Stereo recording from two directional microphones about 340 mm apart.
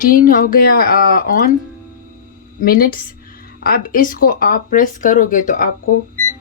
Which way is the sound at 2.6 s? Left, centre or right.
Left.